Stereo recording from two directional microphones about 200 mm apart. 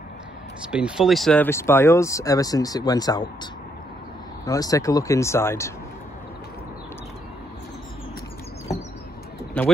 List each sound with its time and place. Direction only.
0.7 s speech: 5° right (ahead or behind); by 3.3 s 20° left (ahead or behind)
4.5 s speech: 15° left (ahead or behind)